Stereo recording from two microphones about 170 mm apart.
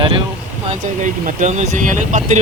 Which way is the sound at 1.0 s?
50° right (ahead or behind).